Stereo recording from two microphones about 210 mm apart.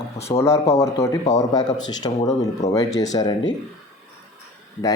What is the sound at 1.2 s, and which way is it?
Speech, 35° left (ahead or behind).